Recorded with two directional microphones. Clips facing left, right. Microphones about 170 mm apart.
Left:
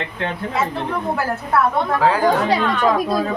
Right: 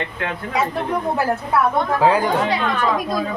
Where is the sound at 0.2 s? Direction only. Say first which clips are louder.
Left 2 dB; 30° left (ahead or behind).